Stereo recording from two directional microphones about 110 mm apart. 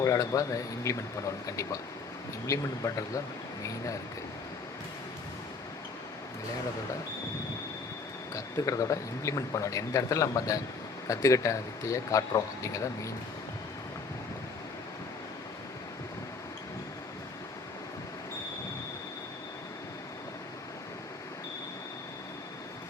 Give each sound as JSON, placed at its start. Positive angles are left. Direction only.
{"t": 0.0, "sound": "speech", "side_deg": 30}
{"t": 8.4, "sound": "speech", "side_deg": 30}